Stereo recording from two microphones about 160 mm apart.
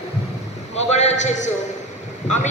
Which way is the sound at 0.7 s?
45° left (ahead or behind).